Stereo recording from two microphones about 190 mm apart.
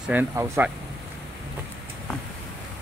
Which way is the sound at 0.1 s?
10° right (ahead or behind).